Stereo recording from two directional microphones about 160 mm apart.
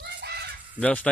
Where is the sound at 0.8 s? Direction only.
10° left (ahead or behind).